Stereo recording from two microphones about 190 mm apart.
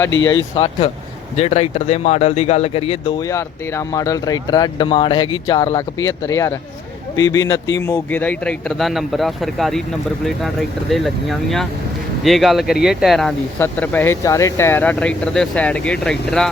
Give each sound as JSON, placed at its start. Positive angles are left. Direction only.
{"t": 0.3, "sound": "speech", "side_deg": 25}
{"t": 3.2, "sound": "a man's voice", "side_deg": 15}